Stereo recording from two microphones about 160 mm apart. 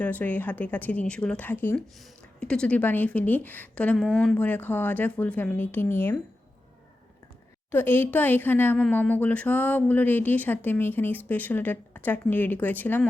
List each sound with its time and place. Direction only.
0.0 s speech: 10° left (ahead or behind)
7.7 s speech: 15° left (ahead or behind)